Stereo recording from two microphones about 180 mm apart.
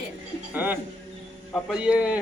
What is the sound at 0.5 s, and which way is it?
A man's voice, 10° right (ahead or behind).